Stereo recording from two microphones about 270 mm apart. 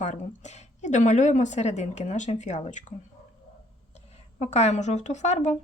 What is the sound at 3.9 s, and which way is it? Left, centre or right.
Speech, left.